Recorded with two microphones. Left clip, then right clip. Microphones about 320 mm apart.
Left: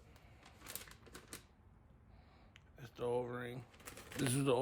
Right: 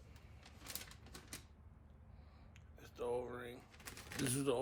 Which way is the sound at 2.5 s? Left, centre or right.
Left.